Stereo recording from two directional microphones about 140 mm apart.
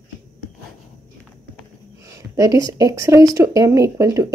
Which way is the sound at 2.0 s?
20° right (ahead or behind).